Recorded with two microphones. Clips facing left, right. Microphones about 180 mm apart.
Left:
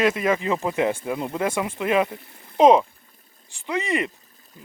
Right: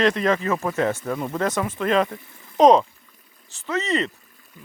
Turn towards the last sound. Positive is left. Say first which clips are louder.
# right 1 dB
turn(degrees=15)  # may be behind; listen again after turning